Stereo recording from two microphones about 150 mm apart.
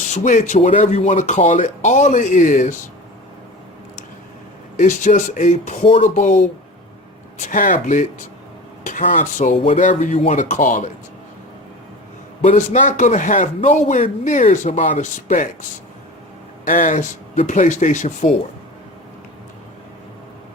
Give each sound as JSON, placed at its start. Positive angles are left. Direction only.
{"t": 0.1, "sound": "a man's voice", "side_deg": 55}
{"t": 4.8, "sound": "a man's voice", "side_deg": 55}
{"t": 8.8, "sound": "a sound", "side_deg": 60}
{"t": 9.1, "sound": "a man's voice", "side_deg": 55}
{"t": 12.4, "sound": "a man's voice", "side_deg": 55}
{"t": 16.6, "sound": "a man's voice", "side_deg": 60}